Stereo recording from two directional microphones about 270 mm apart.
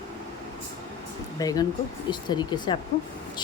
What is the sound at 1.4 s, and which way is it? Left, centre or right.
Speech, centre.